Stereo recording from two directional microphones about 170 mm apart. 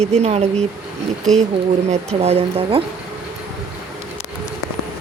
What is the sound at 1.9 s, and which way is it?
Speech, 40° right (ahead or behind).